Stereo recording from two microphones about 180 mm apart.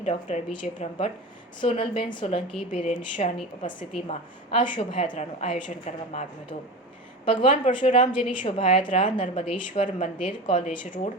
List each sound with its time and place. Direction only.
0.3 s a woman's voice: 35° left (ahead or behind)
7.3 s a woman's voice: 30° left (ahead or behind)
10.5 s speech: 45° left (ahead or behind)